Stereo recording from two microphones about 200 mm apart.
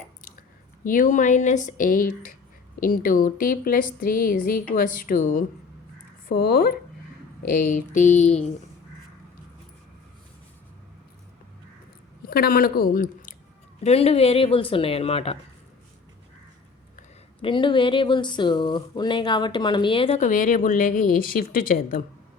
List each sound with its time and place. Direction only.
0.9 s speech: 40° left (ahead or behind)
12.3 s speech: 50° left (ahead or behind)
13.8 s speech: 30° left (ahead or behind)
17.4 s speech: 25° left (ahead or behind); by 22.0 s 45° left (ahead or behind)